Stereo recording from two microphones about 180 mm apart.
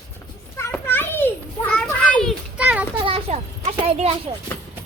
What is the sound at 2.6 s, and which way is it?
Children playing, 5° right (ahead or behind).